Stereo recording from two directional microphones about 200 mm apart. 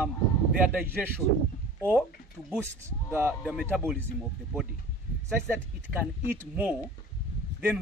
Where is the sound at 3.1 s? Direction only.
10° right (ahead or behind).